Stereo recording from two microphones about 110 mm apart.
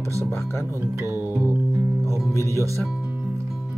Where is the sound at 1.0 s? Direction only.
20° right (ahead or behind).